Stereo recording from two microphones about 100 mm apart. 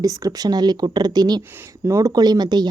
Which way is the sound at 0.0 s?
35° right (ahead or behind).